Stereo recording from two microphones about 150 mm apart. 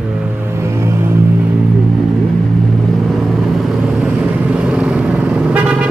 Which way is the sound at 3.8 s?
5° right (ahead or behind).